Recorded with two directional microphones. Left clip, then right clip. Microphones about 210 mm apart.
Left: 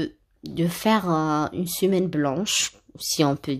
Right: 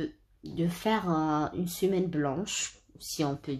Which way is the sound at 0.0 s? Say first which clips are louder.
Left 6 dB; 40° left (ahead or behind).